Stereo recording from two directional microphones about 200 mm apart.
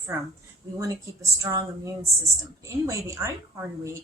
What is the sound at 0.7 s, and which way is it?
Speech, 15° right (ahead or behind).